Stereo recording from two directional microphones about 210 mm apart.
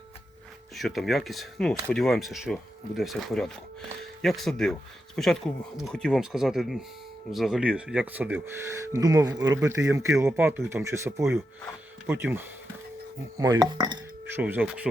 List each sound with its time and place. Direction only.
0.8 s speech: centre (ahead or behind); by 14.4 s 20° right (ahead or behind)
14.4 s speech: 5° right (ahead or behind)